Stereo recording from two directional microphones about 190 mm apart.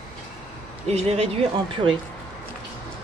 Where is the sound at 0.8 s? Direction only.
35° right (ahead or behind).